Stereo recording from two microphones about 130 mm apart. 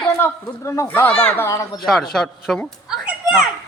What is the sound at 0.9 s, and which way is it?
Speech, 10° left (ahead or behind).